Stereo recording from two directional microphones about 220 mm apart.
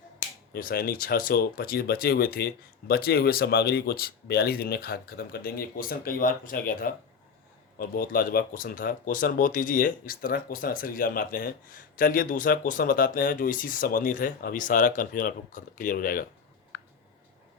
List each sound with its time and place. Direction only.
0.5 s speech: 40° left (ahead or behind)